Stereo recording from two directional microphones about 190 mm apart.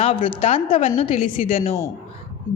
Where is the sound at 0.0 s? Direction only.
30° left (ahead or behind).